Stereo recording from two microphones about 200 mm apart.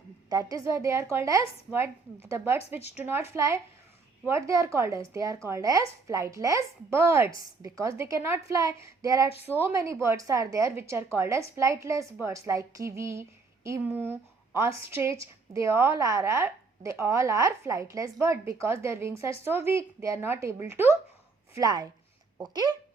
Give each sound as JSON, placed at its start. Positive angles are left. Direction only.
{"t": 0.3, "sound": "a woman's voice", "side_deg": -20}